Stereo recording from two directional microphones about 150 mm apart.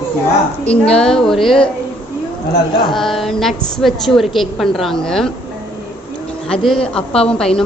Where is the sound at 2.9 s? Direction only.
Centre (ahead or behind).